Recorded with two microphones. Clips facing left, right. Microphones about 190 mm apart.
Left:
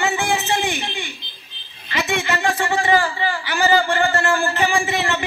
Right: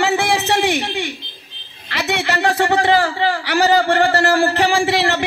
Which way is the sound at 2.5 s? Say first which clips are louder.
Right 4 dB; 65° right (ahead or behind).